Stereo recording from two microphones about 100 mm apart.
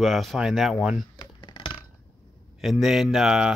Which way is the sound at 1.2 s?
50° left (ahead or behind).